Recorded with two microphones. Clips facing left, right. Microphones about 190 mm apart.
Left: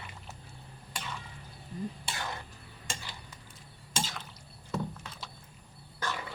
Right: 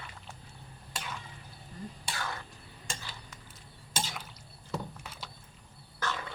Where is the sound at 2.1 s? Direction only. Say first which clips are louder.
Even; 20° left (ahead or behind).